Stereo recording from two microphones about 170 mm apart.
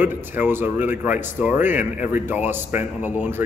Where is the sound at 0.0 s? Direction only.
10° right (ahead or behind).